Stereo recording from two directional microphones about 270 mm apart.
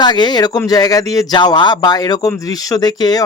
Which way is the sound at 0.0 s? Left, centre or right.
Centre.